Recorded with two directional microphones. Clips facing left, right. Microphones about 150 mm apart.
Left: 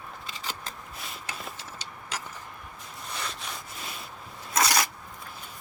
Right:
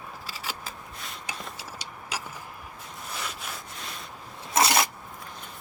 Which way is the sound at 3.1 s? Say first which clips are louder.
Even; 5° right (ahead or behind).